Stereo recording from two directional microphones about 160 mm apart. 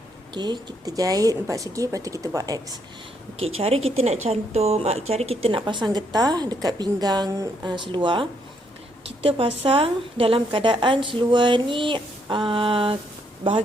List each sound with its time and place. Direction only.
0.3 s speech: 25° right (ahead or behind)
3.4 s speech: 40° right (ahead or behind)
9.0 s a sound: 40° right (ahead or behind)
9.6 s speech: 35° right (ahead or behind)